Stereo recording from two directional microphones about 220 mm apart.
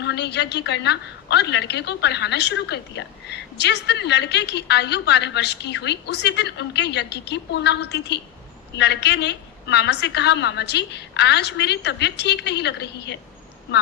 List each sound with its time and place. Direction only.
0.0 s a woman's voice: 50° left (ahead or behind)